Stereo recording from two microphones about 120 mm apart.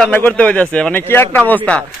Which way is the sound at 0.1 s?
15° left (ahead or behind).